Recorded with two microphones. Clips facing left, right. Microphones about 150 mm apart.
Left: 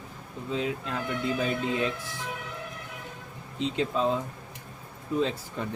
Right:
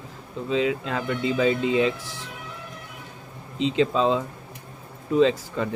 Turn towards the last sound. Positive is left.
turn(degrees=-90)